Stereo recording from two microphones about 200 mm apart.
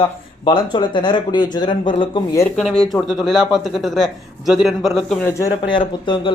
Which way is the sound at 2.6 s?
5° left (ahead or behind).